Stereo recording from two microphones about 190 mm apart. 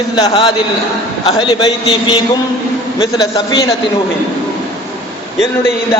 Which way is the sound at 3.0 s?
20° left (ahead or behind).